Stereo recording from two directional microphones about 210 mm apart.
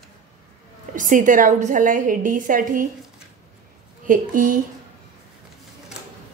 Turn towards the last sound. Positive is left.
turn(degrees=-40)  # may be behind; listen again after turning